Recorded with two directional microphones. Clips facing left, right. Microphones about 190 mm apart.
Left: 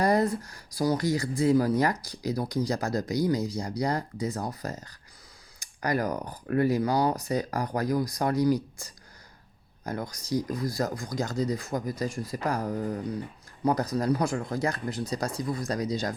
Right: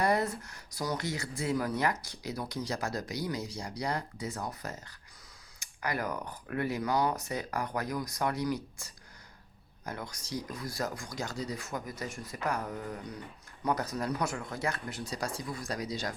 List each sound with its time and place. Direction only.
0.0 s speech: 35° left (ahead or behind)